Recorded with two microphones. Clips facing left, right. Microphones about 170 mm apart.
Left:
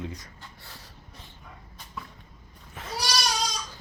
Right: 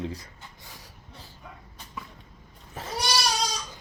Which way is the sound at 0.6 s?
15° right (ahead or behind).